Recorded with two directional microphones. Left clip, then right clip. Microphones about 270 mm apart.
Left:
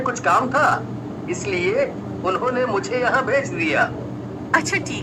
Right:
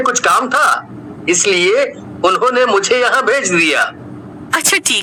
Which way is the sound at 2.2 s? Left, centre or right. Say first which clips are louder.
Right 9 dB; right.